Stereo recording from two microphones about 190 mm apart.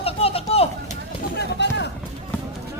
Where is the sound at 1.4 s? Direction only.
65° left (ahead or behind).